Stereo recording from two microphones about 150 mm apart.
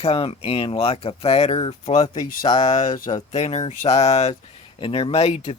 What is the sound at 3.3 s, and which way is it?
Speech, 45° left (ahead or behind).